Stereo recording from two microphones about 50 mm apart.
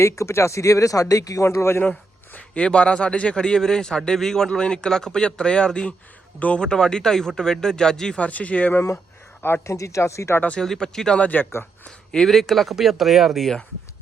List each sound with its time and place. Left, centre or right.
0.0 s speech: left
1.4 s a man's voice: left
1.8 s a man's voice: left; by 8.1 s centre
8.1 s speech: left
9.6 s speech: left
10.6 s a man's voice: centre
11.2 s speech: left
11.9 s speech: centre